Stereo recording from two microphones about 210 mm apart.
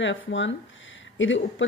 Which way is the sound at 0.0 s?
60° left (ahead or behind).